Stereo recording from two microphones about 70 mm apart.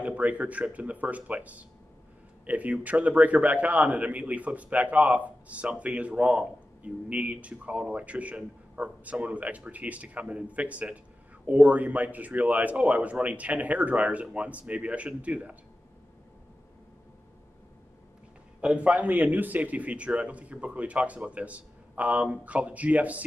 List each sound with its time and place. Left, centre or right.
0.0 s a man's voice: centre
18.6 s a man's voice: centre